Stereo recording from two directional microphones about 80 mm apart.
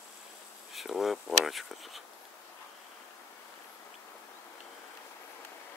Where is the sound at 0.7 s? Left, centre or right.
Centre.